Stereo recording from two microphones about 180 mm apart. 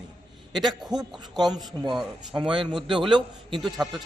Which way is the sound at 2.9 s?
25° right (ahead or behind).